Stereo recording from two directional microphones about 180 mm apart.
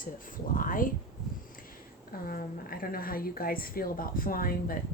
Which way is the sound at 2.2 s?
55° left (ahead or behind).